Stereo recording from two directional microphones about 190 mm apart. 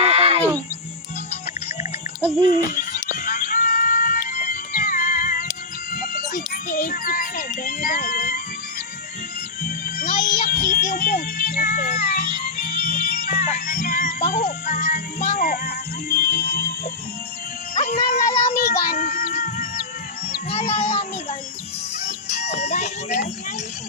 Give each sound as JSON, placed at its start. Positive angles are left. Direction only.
{"t": 0.0, "sound": "a sound", "side_deg": -35}
{"t": 2.5, "sound": "music", "side_deg": 45}
{"t": 9.6, "sound": "music", "side_deg": 50}
{"t": 17.7, "sound": "music", "side_deg": 40}
{"t": 18.6, "sound": "music", "side_deg": 55}
{"t": 20.5, "sound": "child singing", "side_deg": 35}
{"t": 22.4, "sound": "music", "side_deg": 35}